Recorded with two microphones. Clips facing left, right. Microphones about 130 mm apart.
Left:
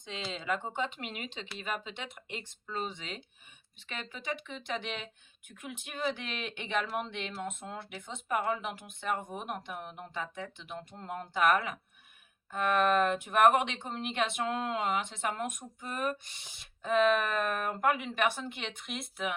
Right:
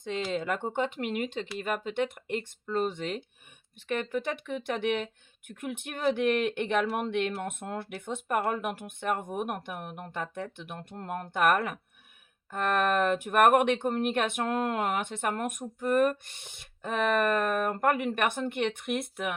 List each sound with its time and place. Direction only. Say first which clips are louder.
0.3 s speech: even; 55° right (ahead or behind)